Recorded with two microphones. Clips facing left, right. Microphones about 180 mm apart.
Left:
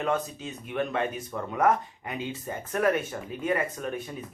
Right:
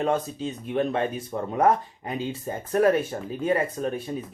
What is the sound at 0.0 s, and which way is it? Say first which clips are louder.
Speech: right 4 dB; 30° right (ahead or behind).